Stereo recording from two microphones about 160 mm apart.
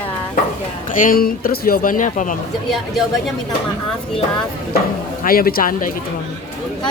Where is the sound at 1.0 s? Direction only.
65° left (ahead or behind).